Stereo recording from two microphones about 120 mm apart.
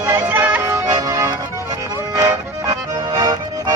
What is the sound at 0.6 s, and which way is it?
Music, 30° right (ahead or behind).